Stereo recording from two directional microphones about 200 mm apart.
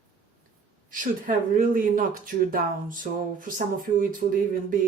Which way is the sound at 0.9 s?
40° right (ahead or behind).